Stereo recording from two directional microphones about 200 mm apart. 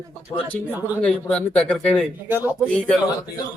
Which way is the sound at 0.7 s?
10° right (ahead or behind).